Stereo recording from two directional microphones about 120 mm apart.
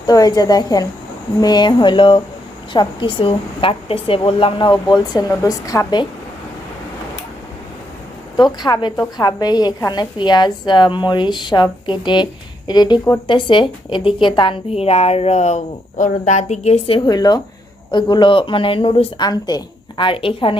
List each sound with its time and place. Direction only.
0.1 s a woman's voice: 30° left (ahead or behind)
5.3 s speech: 30° left (ahead or behind)
8.4 s a woman's voice: 35° left (ahead or behind)
14.7 s speech: 55° left (ahead or behind)
17.1 s a woman's voice: 35° left (ahead or behind); by 19.0 s 50° left (ahead or behind)
19.2 s speech: 35° left (ahead or behind)